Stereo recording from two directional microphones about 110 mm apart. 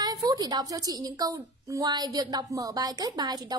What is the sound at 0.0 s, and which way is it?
A woman's voice, 35° right (ahead or behind).